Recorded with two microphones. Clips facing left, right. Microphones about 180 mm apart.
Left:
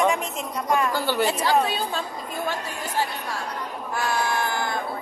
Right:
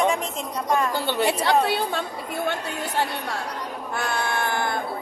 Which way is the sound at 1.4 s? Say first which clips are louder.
Right 1 dB; 65° right (ahead or behind).